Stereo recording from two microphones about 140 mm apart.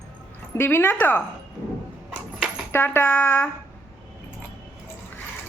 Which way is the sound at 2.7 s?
15° left (ahead or behind).